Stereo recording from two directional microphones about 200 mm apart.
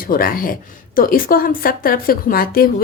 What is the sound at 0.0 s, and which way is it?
Speech, 45° left (ahead or behind).